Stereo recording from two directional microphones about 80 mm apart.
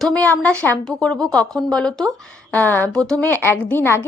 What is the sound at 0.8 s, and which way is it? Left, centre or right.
Speech, centre.